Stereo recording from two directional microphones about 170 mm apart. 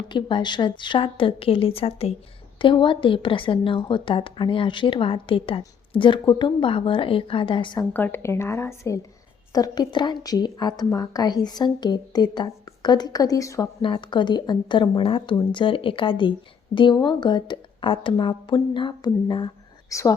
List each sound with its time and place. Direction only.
0.1 s a woman's voice: 30° left (ahead or behind)
7.9 s a woman's voice: 10° left (ahead or behind)